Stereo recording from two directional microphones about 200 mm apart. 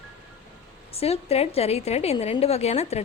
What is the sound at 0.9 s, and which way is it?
A woman's voice, 30° left (ahead or behind).